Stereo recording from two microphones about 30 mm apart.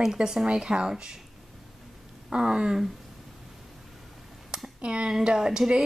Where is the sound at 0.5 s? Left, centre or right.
Right.